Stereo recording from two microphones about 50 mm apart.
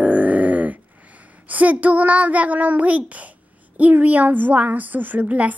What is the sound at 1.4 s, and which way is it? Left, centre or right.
A child's voice, right.